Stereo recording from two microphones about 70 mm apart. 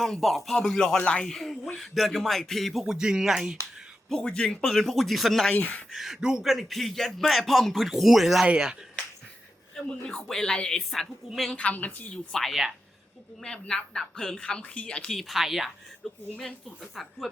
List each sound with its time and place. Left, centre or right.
0.0 s speech: centre
1.3 s speech: centre
4.1 s speech: centre
5.5 s a woman's voice: left
5.9 s speech: centre
8.4 s speech: centre
10.0 s speech: centre
11.5 s a woman's voice: centre
12.1 s speech: centre
13.4 s speech: centre
15.1 s speech: centre